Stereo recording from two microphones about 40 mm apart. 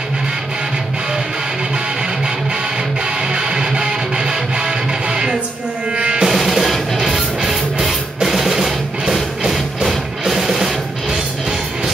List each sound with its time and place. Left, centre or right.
3.3 s music: right
6.2 s music: centre